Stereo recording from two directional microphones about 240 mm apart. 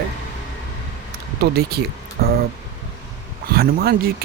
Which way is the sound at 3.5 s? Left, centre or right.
Right.